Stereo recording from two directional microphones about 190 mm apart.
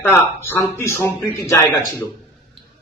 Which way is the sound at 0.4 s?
10° left (ahead or behind).